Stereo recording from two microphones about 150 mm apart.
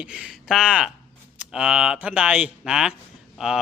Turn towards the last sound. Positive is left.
turn(degrees=-5)  # may be behind; listen again after turning